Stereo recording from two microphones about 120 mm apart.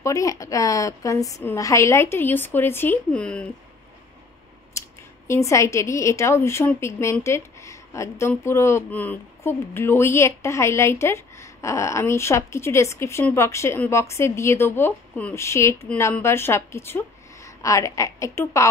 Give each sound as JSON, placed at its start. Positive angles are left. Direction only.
{"t": 0.0, "sound": "speech", "side_deg": 30}
{"t": 4.7, "sound": "scissors", "side_deg": 25}
{"t": 5.3, "sound": "a woman's voice", "side_deg": 25}